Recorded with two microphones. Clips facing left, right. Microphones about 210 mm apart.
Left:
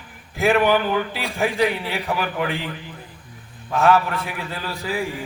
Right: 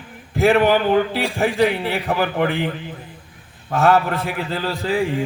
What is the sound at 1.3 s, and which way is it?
A man's voice, 55° right (ahead or behind).